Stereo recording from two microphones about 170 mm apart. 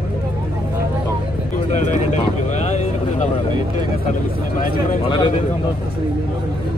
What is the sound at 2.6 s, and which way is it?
Vehicle, 45° left (ahead or behind).